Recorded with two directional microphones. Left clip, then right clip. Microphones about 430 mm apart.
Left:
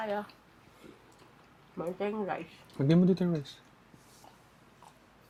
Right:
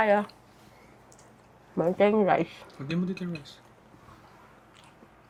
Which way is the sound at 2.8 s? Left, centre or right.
Left.